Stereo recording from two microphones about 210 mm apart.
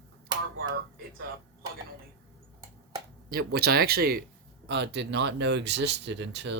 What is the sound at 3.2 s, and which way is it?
Speech, 45° right (ahead or behind).